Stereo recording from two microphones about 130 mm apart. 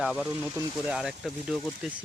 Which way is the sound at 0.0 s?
5° right (ahead or behind).